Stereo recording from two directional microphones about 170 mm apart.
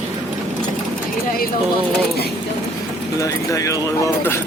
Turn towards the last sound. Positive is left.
turn(degrees=15)  # may be behind; listen again after turning